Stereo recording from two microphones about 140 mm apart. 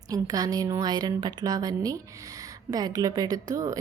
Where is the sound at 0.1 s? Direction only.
25° right (ahead or behind).